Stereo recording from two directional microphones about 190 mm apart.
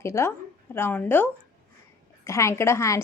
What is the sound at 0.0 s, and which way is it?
A woman's voice, 15° left (ahead or behind).